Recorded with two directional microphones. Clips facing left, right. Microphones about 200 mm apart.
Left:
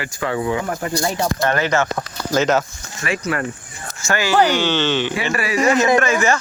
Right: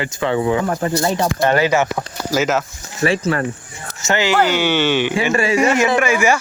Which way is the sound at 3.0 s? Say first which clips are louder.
Right 5 dB; 30° right (ahead or behind).